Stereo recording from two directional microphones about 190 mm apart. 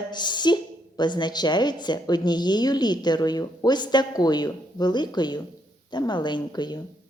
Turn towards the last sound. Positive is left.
turn(degrees=20)  # may be behind; listen again after turning